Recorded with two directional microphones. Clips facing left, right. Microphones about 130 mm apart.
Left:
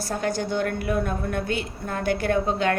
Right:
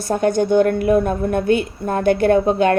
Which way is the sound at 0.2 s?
25° right (ahead or behind).